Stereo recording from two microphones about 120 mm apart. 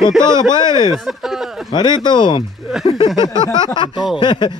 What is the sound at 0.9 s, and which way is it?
Speech, 5° right (ahead or behind).